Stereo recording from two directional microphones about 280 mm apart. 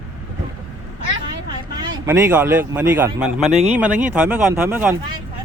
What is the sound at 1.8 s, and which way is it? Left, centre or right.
Speech, centre.